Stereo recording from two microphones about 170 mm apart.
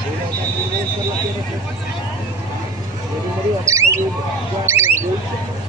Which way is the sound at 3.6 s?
15° right (ahead or behind).